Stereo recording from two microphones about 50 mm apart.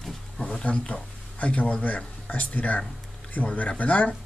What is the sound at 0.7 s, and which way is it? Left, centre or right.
Speech, left.